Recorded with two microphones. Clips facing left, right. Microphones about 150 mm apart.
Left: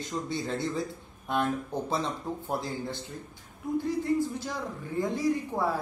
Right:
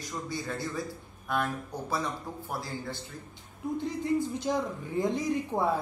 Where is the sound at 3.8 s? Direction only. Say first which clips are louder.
Left 2 dB; 20° right (ahead or behind).